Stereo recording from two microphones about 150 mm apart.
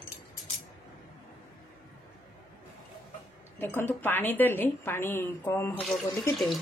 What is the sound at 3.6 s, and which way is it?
Speech, 15° left (ahead or behind).